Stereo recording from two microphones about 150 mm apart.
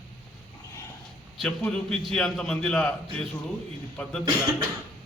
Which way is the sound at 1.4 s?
5° left (ahead or behind).